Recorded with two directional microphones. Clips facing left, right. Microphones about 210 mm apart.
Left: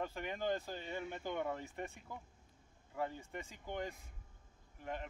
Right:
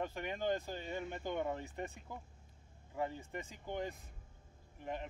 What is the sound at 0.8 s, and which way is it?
Speech, 5° left (ahead or behind).